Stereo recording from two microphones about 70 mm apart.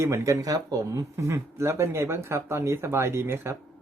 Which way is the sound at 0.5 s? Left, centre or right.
Right.